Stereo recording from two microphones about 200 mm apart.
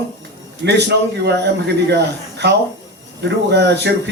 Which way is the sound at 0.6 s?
55° right (ahead or behind).